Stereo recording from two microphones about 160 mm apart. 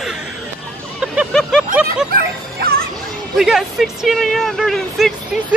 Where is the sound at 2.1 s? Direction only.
70° right (ahead or behind).